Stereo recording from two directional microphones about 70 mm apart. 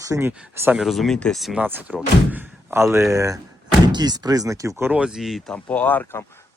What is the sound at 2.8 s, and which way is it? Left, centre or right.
Speech, right.